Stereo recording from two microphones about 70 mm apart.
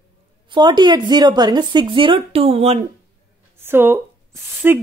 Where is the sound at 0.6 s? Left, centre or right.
Right.